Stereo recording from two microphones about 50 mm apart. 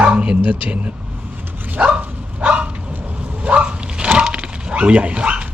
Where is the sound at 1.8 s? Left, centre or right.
Right.